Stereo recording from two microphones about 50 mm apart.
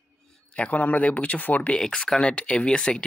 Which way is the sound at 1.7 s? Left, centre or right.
Centre.